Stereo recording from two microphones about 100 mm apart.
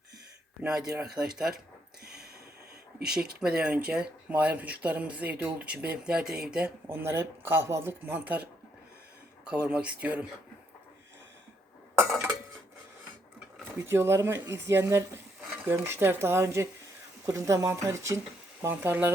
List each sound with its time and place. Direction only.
0.6 s speech: 5° right (ahead or behind)
3.1 s speech: 10° right (ahead or behind)
6.8 s speech: 20° right (ahead or behind)
13.7 s speech: 25° right (ahead or behind)